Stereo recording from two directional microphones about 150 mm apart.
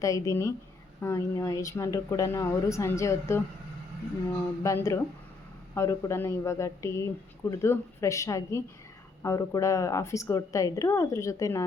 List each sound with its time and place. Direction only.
0.0 s speech: 20° left (ahead or behind)
4.6 s speech: 20° left (ahead or behind)